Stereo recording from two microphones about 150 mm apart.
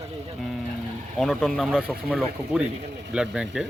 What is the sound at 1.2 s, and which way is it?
A man's voice, centre (ahead or behind).